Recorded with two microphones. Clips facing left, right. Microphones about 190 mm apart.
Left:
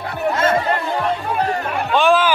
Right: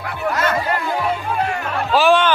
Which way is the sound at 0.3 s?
25° left (ahead or behind).